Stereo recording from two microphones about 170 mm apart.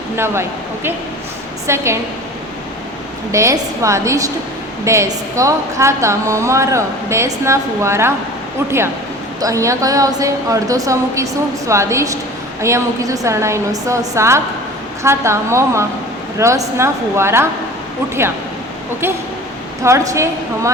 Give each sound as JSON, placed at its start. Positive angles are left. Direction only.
{"t": 1.6, "sound": "a woman's voice", "side_deg": -15}
{"t": 3.3, "sound": "a woman's voice", "side_deg": -15}
{"t": 9.4, "sound": "a woman's voice", "side_deg": -20}
{"t": 19.0, "sound": "a woman's voice", "side_deg": -15}